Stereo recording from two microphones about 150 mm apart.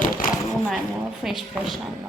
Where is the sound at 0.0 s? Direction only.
60° left (ahead or behind).